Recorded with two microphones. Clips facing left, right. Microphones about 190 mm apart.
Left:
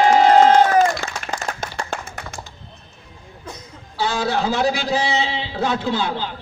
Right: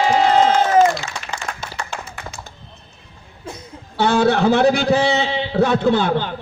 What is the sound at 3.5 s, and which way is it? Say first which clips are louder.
Music: right 3 dB; 25° right (ahead or behind).